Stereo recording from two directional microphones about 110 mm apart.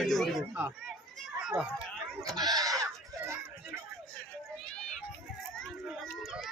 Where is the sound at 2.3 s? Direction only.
35° right (ahead or behind).